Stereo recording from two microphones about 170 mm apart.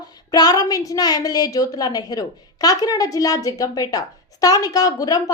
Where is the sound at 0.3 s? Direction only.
20° left (ahead or behind).